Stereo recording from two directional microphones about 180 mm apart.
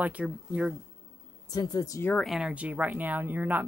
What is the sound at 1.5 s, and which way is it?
Speech, 20° left (ahead or behind).